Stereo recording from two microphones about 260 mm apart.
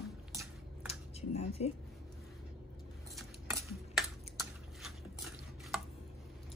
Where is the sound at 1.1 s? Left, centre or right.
Left.